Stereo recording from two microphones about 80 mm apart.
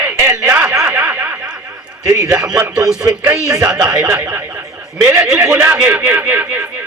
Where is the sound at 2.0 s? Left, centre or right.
Right.